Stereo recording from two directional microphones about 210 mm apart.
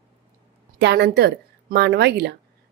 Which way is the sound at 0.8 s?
50° right (ahead or behind).